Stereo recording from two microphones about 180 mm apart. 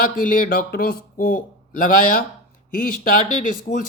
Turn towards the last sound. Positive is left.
turn(degrees=45)  # may be behind; listen again after turning